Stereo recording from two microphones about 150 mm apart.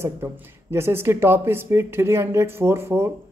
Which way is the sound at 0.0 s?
15° right (ahead or behind).